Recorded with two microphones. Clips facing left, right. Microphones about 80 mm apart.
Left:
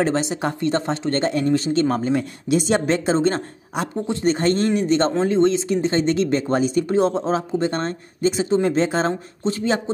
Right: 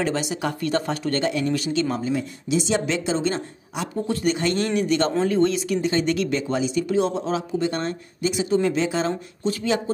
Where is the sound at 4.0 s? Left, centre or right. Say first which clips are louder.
Left 2 dB; left.